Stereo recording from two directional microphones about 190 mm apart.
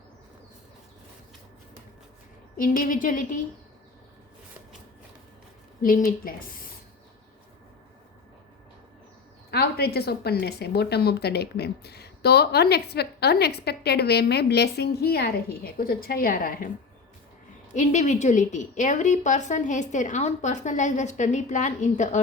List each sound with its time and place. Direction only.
2.6 s speech: 45° left (ahead or behind)
5.8 s speech: 45° left (ahead or behind)
9.5 s a woman's voice: 55° left (ahead or behind)
17.7 s a woman's voice: 40° left (ahead or behind)